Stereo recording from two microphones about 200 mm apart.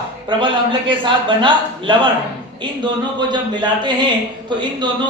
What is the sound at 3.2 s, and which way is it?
A man's voice, 20° right (ahead or behind).